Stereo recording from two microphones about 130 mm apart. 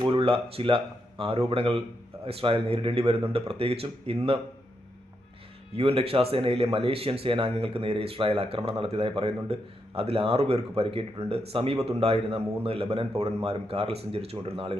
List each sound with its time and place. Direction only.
0.0 s a man's voice: 45° right (ahead or behind)
5.7 s a man's voice: 50° right (ahead or behind)